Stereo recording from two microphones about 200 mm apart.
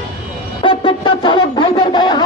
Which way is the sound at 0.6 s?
25° left (ahead or behind).